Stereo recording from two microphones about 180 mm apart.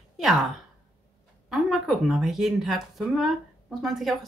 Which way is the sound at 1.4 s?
Centre (ahead or behind).